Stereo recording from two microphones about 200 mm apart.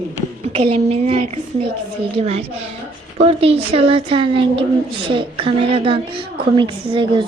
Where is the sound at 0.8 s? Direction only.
30° right (ahead or behind).